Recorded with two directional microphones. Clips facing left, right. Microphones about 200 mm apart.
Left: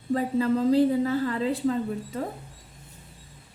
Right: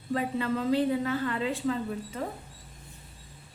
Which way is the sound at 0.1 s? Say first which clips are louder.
Left 5 dB; 35° left (ahead or behind).